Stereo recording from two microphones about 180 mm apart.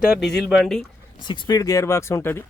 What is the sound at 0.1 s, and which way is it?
Speech, centre (ahead or behind).